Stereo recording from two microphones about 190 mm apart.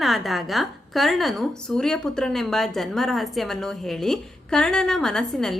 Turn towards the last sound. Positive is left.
turn(degrees=5)  # may be behind; listen again after turning